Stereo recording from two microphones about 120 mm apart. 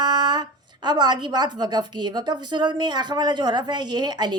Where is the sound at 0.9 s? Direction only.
35° right (ahead or behind).